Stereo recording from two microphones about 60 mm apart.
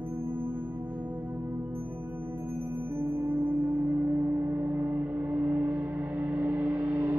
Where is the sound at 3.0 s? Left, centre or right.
Right.